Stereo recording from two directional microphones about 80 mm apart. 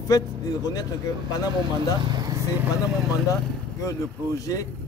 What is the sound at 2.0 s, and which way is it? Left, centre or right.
Speech, right.